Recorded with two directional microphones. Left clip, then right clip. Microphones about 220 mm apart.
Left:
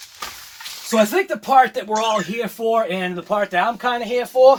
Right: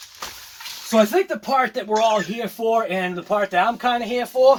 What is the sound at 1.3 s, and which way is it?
Speech, 20° left (ahead or behind).